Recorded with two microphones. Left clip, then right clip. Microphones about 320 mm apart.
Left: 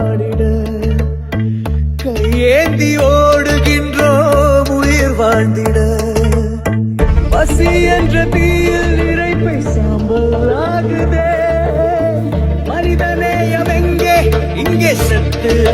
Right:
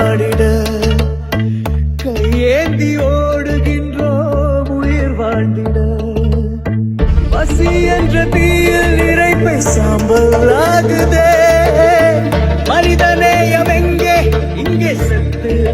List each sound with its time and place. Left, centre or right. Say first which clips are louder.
0.0 s music: right 4 dB; right
2.3 s music: left 3 dB; centre; by 5.7 s left
7.3 s music: left 2 dB; centre; by 10.2 s right
10.3 s music: right 5 dB; right
12.6 s music: right 5 dB; right; by 14.9 s centre